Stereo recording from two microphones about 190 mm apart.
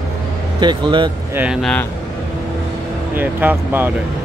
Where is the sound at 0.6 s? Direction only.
25° right (ahead or behind).